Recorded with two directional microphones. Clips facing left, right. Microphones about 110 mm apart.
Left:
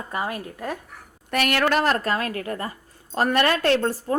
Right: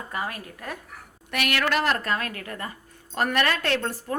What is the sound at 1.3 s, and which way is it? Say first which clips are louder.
A woman's voice: left 4 dB; 40° left (ahead or behind).